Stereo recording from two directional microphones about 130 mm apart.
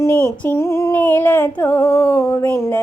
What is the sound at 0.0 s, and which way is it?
Female singing, 20° left (ahead or behind).